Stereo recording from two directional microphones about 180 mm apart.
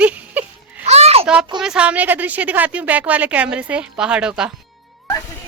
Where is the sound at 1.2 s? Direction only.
5° right (ahead or behind).